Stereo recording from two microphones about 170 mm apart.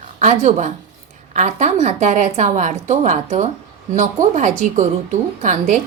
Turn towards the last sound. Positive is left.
turn(degrees=-45)  # may be behind; listen again after turning